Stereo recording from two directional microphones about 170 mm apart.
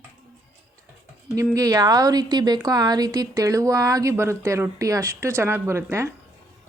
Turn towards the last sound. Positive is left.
turn(degrees=-15)  # may be behind; listen again after turning